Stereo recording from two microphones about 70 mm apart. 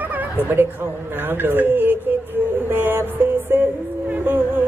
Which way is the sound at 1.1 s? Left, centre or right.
Right.